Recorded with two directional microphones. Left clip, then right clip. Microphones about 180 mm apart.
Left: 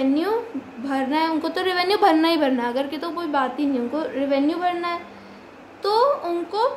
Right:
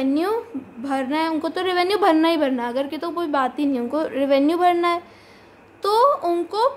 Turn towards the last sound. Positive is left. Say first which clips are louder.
# right 2 dB
turn(degrees=-35)  # may be behind; listen again after turning